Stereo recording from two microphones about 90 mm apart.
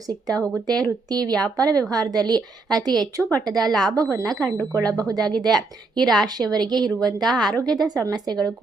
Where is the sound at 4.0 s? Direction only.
40° right (ahead or behind).